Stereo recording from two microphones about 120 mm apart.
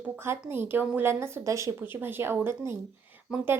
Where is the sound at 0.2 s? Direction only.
20° right (ahead or behind).